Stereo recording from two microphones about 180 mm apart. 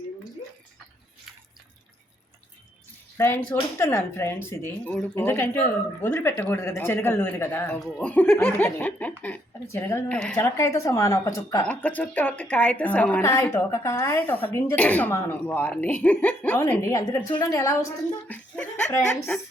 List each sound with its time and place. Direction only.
3.2 s a woman's voice: 10° left (ahead or behind)